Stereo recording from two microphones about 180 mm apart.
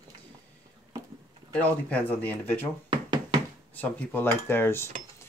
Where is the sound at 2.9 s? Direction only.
25° right (ahead or behind).